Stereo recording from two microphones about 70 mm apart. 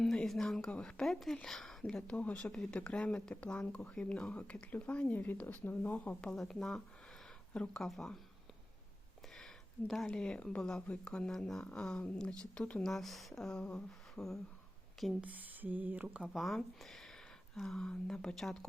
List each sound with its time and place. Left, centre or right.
0.0 s speech: centre; by 6.1 s left
6.2 s speech: centre
9.3 s a sound: centre
10.1 s speech: centre
12.9 s speech: centre
15.2 s speech: right
16.3 s speech: centre